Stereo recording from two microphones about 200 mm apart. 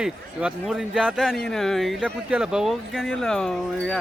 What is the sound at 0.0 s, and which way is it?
Speech, 5° right (ahead or behind).